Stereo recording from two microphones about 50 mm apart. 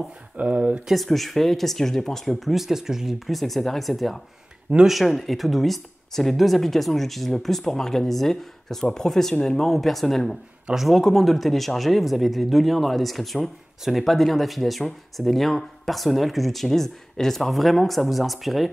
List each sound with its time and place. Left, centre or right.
0.4 s speech: right
0.9 s speech: centre